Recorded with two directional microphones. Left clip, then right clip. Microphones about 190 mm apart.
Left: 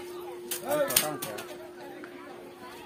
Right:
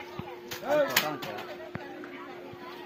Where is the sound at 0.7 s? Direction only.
35° left (ahead or behind).